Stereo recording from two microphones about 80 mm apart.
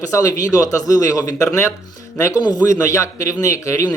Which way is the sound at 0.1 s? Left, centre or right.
Left.